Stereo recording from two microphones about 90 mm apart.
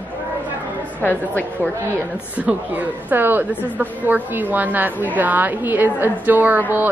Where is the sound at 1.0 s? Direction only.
15° left (ahead or behind).